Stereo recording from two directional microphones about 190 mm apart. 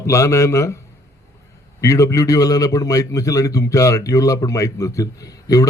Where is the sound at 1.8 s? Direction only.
15° left (ahead or behind).